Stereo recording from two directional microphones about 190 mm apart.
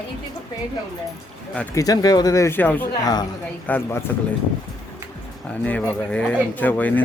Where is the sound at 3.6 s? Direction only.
10° left (ahead or behind).